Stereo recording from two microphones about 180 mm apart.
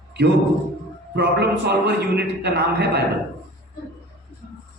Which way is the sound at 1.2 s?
65° right (ahead or behind).